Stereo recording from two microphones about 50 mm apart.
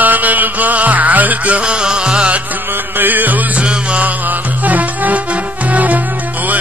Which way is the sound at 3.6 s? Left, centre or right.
Right.